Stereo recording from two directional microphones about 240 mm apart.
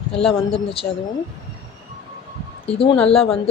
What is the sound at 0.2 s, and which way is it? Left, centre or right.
Speech, left.